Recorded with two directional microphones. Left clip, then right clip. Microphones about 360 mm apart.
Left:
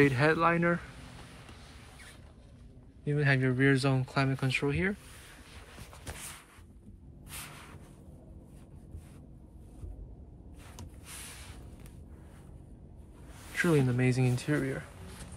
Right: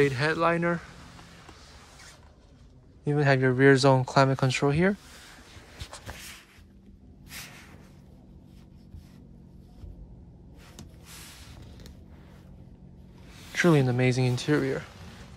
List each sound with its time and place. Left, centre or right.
0.0 s speech: centre
3.1 s speech: centre
13.6 s speech: centre